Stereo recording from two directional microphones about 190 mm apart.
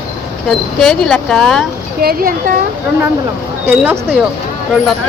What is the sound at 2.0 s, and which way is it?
Speech, 50° right (ahead or behind).